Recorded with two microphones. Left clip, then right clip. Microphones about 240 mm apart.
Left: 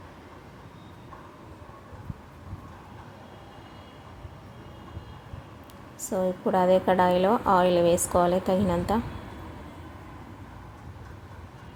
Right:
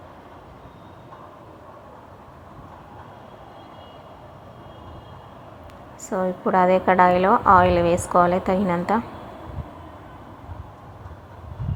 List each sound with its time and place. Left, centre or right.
6.0 s a woman's voice: centre